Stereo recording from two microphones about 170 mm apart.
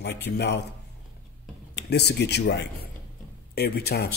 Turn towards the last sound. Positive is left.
turn(degrees=70)  # may be behind; listen again after turning